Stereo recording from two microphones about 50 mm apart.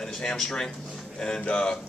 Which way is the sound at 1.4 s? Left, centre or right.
Left.